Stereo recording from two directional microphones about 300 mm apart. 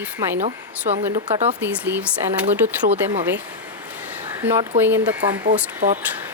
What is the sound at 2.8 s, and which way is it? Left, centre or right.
Speech, right.